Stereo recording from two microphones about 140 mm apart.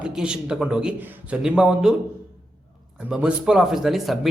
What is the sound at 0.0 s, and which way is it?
A man's voice, 5° right (ahead or behind).